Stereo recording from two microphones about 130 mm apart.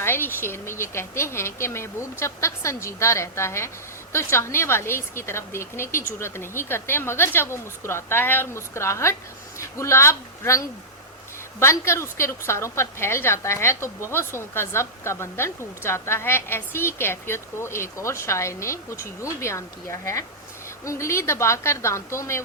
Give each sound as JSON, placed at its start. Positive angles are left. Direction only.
{"t": 0.0, "sound": "a woman's voice", "side_deg": 15}